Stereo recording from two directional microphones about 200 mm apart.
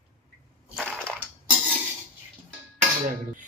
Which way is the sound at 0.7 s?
Centre (ahead or behind).